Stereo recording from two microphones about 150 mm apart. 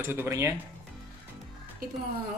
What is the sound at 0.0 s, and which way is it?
Speech, 15° right (ahead or behind).